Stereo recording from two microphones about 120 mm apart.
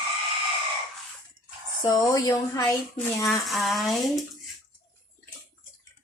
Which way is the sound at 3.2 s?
Centre (ahead or behind).